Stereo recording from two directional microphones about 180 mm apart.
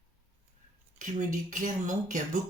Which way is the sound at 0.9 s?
45° right (ahead or behind).